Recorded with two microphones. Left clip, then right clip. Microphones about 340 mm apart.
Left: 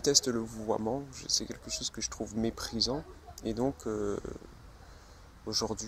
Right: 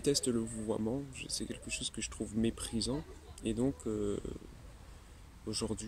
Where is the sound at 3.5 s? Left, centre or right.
Left.